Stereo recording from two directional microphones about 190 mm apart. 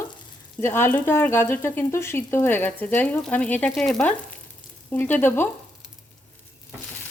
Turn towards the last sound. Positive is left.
turn(degrees=10)  # may be behind; listen again after turning